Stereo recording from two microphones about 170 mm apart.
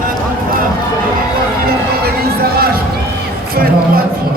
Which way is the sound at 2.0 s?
65° right (ahead or behind).